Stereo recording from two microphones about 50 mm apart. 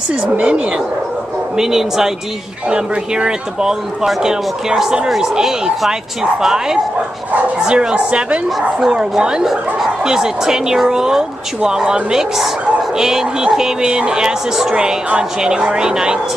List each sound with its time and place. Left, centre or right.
0.1 s speech: right
1.6 s a woman's voice: centre